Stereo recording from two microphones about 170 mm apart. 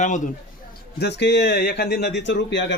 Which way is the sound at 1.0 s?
90° left.